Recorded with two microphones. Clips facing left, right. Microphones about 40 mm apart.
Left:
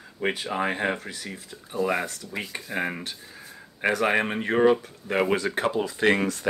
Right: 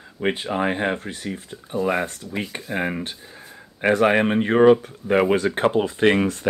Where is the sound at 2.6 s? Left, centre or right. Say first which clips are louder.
Right 3 dB; centre.